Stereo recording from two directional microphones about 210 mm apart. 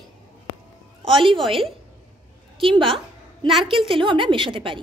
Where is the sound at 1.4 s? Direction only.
Centre (ahead or behind).